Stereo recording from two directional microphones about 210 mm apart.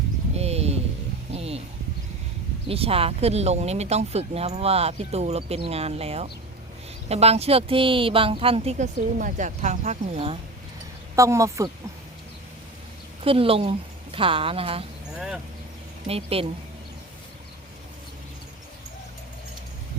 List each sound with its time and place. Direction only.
0.3 s a sound: 30° right (ahead or behind)
2.6 s speech: 25° right (ahead or behind)
11.1 s speech: 15° right (ahead or behind)
13.2 s speech: 25° right (ahead or behind)
16.0 s speech: 30° right (ahead or behind)